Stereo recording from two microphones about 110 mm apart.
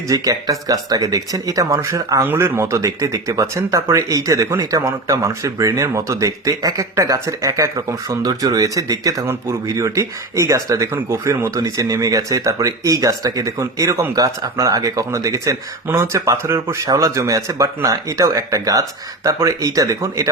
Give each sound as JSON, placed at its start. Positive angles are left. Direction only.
{"t": 0.1, "sound": "speech", "side_deg": -30}